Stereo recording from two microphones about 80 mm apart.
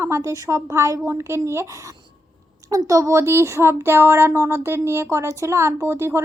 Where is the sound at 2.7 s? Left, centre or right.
Right.